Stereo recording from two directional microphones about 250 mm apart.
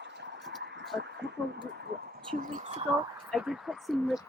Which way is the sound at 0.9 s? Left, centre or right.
Right.